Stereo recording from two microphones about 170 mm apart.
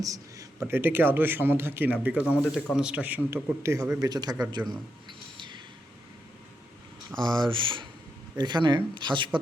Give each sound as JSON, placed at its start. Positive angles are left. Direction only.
{"t": 0.0, "sound": "a man's voice", "side_deg": -20}
{"t": 7.3, "sound": "a man's voice", "side_deg": -30}